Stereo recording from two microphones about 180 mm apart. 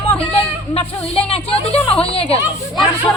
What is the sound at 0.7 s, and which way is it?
A woman's voice, 35° left (ahead or behind).